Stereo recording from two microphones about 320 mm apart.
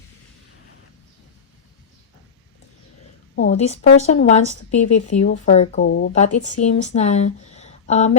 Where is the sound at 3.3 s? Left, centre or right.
Left.